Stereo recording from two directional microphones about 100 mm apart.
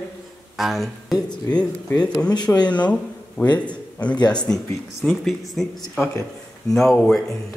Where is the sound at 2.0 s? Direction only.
45° left (ahead or behind).